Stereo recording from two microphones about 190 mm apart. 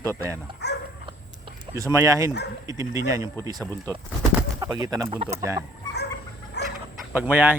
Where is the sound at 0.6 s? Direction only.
60° left (ahead or behind).